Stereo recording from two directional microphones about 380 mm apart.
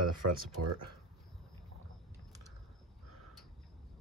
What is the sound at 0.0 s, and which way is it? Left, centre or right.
Speech, right.